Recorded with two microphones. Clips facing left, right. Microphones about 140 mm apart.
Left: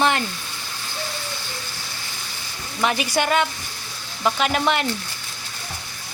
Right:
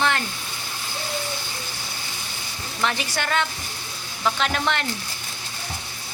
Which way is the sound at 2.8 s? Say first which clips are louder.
Left 5 dB; 15° left (ahead or behind).